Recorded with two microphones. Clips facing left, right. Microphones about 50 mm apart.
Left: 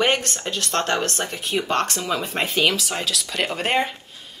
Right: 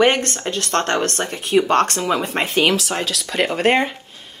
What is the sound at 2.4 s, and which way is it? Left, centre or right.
Speech, centre.